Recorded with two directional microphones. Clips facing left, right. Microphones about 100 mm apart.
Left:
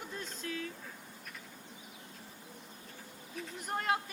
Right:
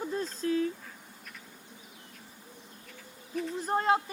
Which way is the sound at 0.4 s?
30° right (ahead or behind).